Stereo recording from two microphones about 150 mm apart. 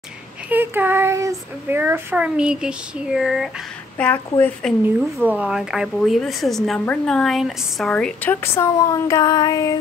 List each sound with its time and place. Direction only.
0.5 s child singing: 15° right (ahead or behind)
4.0 s a woman's voice: 10° left (ahead or behind)
5.2 s a woman's voice: 10° right (ahead or behind); by 9.8 s 25° left (ahead or behind)